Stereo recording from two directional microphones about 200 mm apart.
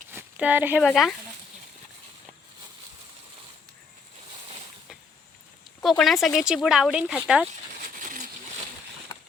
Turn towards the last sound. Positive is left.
turn(degrees=0)  # may be behind; listen again after turning